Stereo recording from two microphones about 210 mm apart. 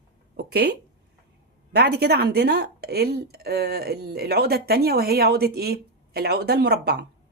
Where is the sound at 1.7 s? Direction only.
50° right (ahead or behind).